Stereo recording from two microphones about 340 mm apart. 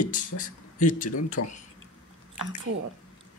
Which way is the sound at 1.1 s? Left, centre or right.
Left.